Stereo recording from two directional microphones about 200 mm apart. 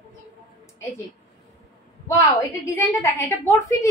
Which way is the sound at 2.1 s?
15° left (ahead or behind).